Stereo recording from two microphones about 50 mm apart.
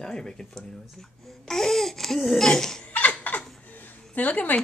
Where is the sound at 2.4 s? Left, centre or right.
Centre.